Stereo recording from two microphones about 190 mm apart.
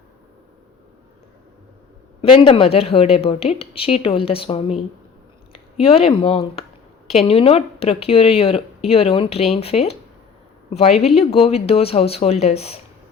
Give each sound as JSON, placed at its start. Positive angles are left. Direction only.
{"t": 2.2, "sound": "a woman's voice", "side_deg": 30}
{"t": 5.8, "sound": "a woman's voice", "side_deg": 30}